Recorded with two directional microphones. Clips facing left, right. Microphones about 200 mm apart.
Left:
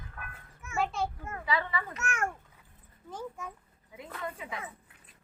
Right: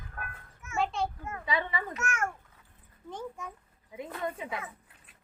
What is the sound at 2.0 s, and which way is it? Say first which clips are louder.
Speech: right 1 dB; 35° left (ahead or behind).